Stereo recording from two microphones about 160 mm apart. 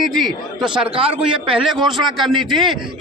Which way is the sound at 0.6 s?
30° right (ahead or behind).